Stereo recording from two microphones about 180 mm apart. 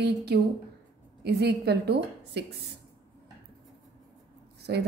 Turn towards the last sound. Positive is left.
turn(degrees=-65)  # may be behind; listen again after turning